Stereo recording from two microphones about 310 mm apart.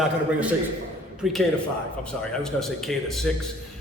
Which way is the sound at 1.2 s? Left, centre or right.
Centre.